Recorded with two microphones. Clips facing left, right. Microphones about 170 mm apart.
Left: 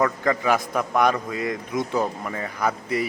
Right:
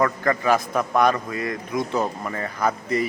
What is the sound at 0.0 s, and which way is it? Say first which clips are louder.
A man's voice: right 1 dB; 10° left (ahead or behind).